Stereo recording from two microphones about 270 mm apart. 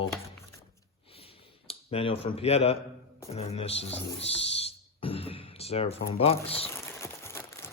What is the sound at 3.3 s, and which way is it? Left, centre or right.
Speech, left.